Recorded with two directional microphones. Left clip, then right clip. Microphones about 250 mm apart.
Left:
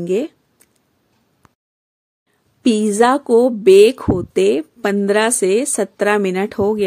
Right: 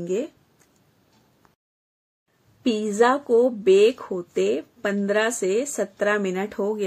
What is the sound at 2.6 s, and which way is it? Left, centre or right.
Speech, left.